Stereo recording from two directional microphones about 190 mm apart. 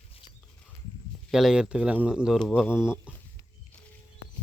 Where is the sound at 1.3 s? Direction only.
Centre (ahead or behind).